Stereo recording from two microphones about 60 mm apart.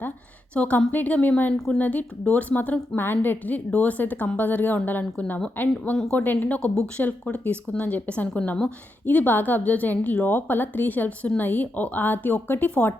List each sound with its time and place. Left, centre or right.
0.5 s speech: left
1.5 s a woman's voice: centre
1.8 s a woman's voice: left
6.6 s speech: centre
7.3 s speech: left